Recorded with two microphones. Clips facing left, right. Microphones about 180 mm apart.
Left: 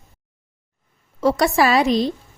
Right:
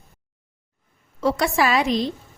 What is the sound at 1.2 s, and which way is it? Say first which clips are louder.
Speech: left 3 dB; 40° left (ahead or behind).